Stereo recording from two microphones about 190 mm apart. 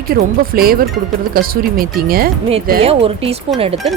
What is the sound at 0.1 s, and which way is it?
Speech, 50° right (ahead or behind).